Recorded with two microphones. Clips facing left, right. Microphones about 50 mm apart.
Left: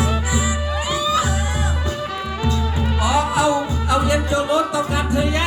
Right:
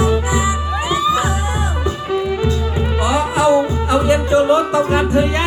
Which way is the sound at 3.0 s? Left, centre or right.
Right.